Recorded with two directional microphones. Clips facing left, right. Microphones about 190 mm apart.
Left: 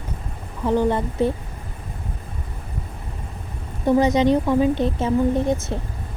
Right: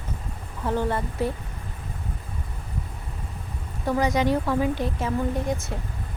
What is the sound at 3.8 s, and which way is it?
A woman's voice, 20° left (ahead or behind).